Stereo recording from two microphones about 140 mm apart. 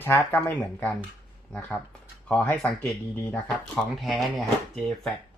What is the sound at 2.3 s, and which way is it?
Speech, 10° left (ahead or behind).